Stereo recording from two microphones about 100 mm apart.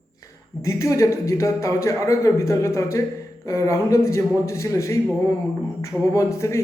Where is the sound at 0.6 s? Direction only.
30° left (ahead or behind).